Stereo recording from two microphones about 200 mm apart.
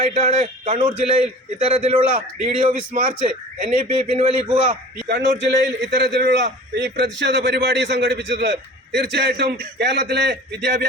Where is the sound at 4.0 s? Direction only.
25° right (ahead or behind).